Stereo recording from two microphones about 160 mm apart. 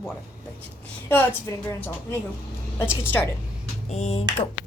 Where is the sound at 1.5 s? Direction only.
15° left (ahead or behind).